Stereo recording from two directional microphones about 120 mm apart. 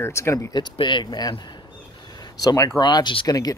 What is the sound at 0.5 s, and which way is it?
Speech, 40° left (ahead or behind).